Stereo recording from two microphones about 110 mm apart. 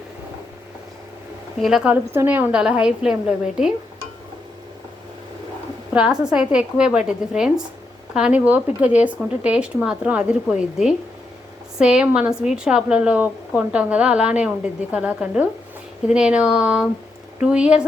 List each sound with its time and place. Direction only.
1.6 s a woman's voice: 5° right (ahead or behind)
1.9 s speech: 15° right (ahead or behind)
5.9 s speech: 10° right (ahead or behind)